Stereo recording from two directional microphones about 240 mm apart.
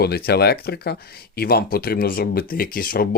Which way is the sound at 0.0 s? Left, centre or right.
Left.